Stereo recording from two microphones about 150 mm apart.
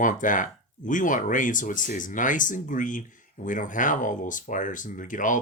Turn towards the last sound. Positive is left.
turn(degrees=60)  # may be behind; listen again after turning